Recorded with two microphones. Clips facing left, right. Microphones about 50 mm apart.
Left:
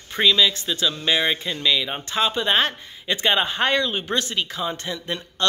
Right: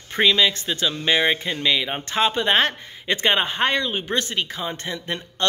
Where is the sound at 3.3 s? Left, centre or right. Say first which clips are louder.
Even; right.